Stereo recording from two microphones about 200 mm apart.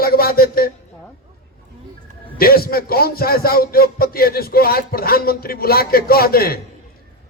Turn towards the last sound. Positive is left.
turn(degrees=50)  # may be behind; listen again after turning